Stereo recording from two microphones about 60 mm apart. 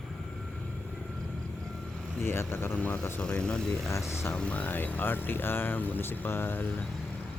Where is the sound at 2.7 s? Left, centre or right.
Left.